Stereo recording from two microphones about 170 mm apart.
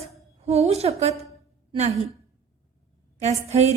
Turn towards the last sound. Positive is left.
turn(degrees=-40)  # may be behind; listen again after turning